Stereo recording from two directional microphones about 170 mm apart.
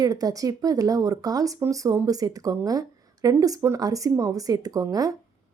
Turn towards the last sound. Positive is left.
turn(degrees=-20)  # may be behind; listen again after turning